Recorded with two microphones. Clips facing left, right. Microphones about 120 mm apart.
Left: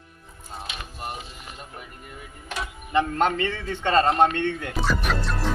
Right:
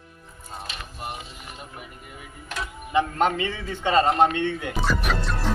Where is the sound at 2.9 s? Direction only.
5° right (ahead or behind).